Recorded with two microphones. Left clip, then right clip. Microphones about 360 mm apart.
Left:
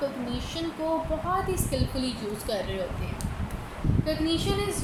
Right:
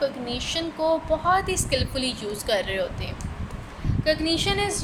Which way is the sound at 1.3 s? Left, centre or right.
Right.